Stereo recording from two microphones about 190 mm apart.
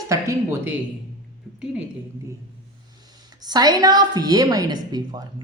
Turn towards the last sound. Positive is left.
turn(degrees=-20)  # may be behind; listen again after turning